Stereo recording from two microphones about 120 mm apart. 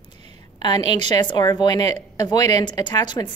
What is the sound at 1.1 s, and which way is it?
A woman's voice, 35° left (ahead or behind).